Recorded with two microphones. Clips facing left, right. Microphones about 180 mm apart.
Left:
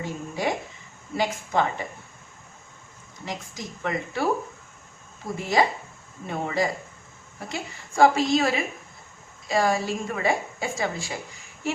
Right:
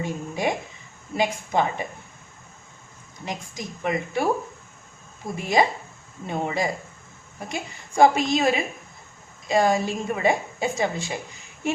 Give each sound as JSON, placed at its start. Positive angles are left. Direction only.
{"t": 0.0, "sound": "a woman's voice", "side_deg": -20}
{"t": 3.2, "sound": "a woman's voice", "side_deg": -15}